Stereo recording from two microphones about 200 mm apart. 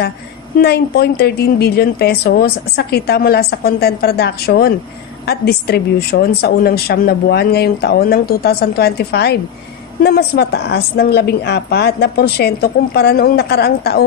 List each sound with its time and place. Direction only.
0.6 s a woman's voice: 50° left (ahead or behind)